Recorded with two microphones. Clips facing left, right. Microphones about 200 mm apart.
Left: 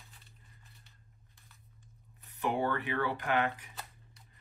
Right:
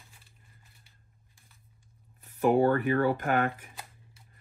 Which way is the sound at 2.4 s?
45° right (ahead or behind).